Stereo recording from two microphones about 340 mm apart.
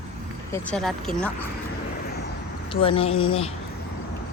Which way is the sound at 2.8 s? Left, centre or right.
Centre.